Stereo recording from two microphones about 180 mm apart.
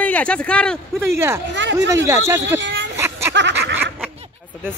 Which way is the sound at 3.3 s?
80° right.